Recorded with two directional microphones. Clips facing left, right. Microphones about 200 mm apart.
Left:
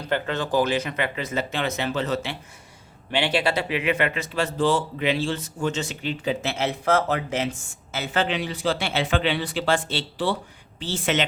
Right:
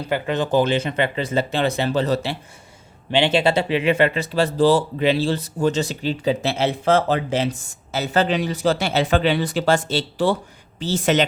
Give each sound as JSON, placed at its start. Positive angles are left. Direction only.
{"t": 0.1, "sound": "speech", "side_deg": -15}
{"t": 3.1, "sound": "speech", "side_deg": -25}